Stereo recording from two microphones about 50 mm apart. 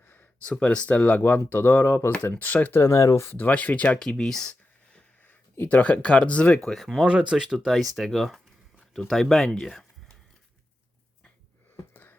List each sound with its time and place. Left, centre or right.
0.4 s speech: left
0.9 s speech: left
1.2 s speech: left
2.4 s speech: left
2.7 s speech: left
3.3 s speech: left
4.2 s speech: centre
5.3 s speech: left
6.7 s speech: centre
7.0 s speech: right
7.7 s speech: centre